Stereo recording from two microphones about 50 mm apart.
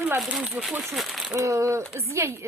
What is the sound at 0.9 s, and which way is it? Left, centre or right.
Crumpling, centre.